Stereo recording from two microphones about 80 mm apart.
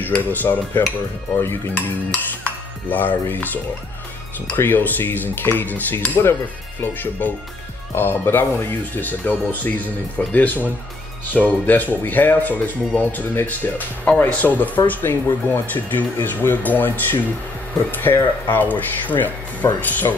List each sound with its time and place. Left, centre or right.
0.0 s speech: left
2.4 s speech: left
17.9 s speech: left